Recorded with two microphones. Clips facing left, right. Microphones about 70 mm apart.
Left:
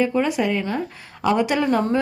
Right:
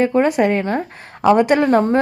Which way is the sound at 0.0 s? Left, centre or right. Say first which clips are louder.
Right 5 dB; right.